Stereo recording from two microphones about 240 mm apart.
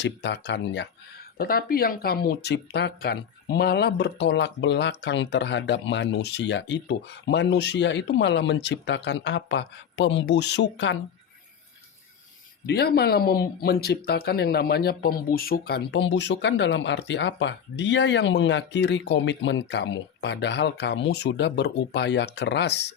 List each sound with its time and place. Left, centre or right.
0.0 s speech: left
12.6 s speech: left